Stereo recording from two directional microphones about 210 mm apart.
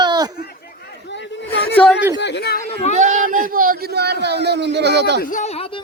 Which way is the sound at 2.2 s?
50° left (ahead or behind).